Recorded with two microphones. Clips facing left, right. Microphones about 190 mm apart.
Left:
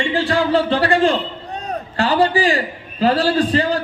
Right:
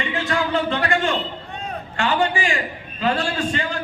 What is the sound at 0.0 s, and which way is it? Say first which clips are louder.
A man's voice: left 5 dB; 30° left (ahead or behind).